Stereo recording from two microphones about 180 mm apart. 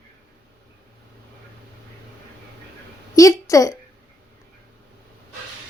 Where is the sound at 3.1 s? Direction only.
20° left (ahead or behind).